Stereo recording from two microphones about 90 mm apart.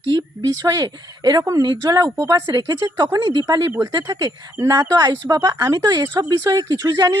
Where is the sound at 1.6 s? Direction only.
50° right (ahead or behind).